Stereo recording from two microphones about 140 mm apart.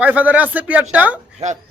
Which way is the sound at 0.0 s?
10° right (ahead or behind).